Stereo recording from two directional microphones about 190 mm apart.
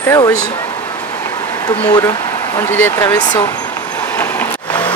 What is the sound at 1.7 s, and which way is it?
Speech, 20° left (ahead or behind).